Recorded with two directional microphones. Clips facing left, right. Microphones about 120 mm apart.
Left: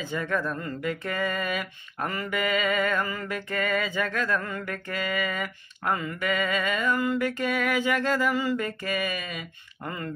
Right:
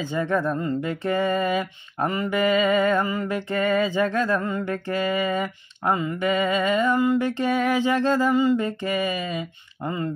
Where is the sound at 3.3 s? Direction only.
30° right (ahead or behind).